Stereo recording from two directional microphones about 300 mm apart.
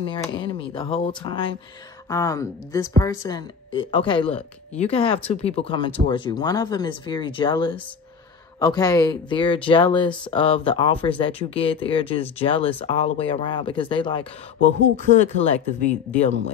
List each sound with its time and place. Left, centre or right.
0.0 s speech: centre
15.8 s speech: centre